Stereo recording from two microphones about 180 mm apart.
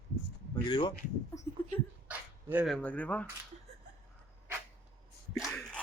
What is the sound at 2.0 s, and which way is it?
Dog, 10° right (ahead or behind).